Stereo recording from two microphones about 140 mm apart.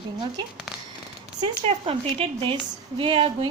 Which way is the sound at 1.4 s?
45° right (ahead or behind).